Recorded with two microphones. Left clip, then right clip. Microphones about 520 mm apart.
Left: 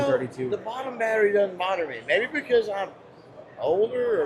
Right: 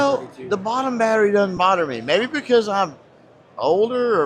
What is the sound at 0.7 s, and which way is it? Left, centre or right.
Speech, right.